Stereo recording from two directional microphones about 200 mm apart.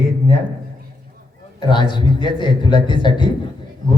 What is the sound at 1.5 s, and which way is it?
A man's voice, 20° left (ahead or behind).